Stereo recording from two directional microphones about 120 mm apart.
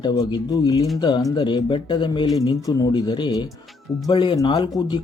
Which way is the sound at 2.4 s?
30° left (ahead or behind).